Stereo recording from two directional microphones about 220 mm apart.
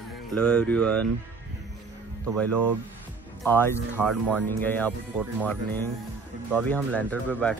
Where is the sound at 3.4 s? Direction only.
10° left (ahead or behind).